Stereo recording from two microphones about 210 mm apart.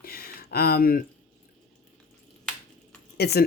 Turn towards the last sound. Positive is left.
turn(degrees=50)  # may be behind; listen again after turning